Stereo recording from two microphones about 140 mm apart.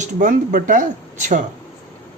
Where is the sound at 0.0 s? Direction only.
70° right (ahead or behind).